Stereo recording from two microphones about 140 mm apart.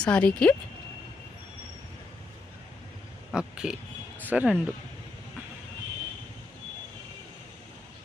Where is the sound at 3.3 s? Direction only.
5° right (ahead or behind).